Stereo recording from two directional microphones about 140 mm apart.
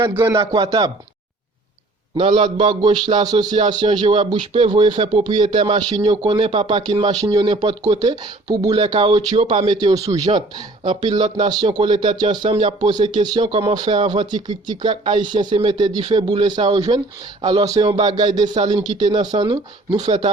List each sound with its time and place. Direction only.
0.1 s speech: 15° right (ahead or behind)
0.3 s speech: 30° right (ahead or behind)
2.1 s speech: 40° right (ahead or behind)
12.5 s speech: 45° right (ahead or behind)